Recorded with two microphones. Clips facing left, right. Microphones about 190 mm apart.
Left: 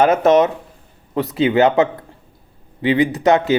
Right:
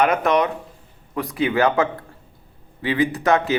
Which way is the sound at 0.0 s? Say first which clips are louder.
Left 6 dB; 25° left (ahead or behind).